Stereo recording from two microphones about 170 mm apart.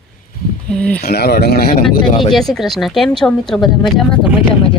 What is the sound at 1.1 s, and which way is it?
Speech, 70° left (ahead or behind).